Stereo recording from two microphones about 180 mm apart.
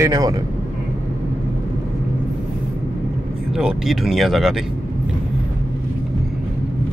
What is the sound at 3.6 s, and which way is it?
Speech, 5° right (ahead or behind).